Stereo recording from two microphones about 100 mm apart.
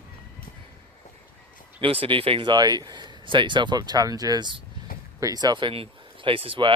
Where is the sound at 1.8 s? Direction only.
65° right (ahead or behind).